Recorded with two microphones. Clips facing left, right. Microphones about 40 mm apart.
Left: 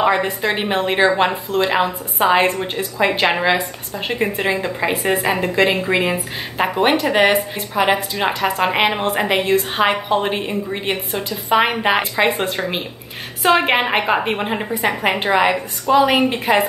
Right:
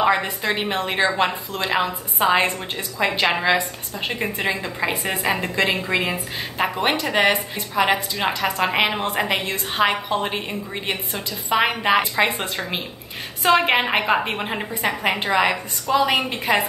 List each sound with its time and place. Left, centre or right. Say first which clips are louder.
0.0 s a woman's voice: left 3 dB; centre
3.1 s a woman's voice: left 2 dB; left
3.3 s a woman's voice: left 2 dB; centre